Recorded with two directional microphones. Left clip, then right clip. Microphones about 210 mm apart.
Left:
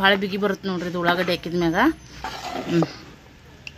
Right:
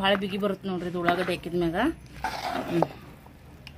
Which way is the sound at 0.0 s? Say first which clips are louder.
Left 6 dB; 35° left (ahead or behind).